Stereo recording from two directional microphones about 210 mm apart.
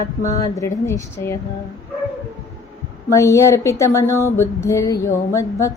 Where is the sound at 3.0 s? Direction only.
15° left (ahead or behind).